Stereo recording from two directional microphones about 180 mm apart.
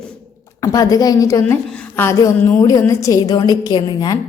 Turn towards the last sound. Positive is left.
turn(degrees=25)  # may be behind; listen again after turning